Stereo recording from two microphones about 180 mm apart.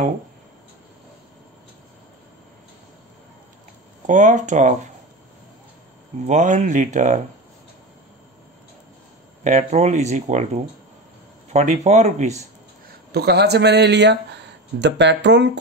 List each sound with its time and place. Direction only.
4.0 s speech: 45° right (ahead or behind)
6.1 s speech: 40° right (ahead or behind)
9.4 s speech: 40° right (ahead or behind)
13.1 s speech: 65° right (ahead or behind)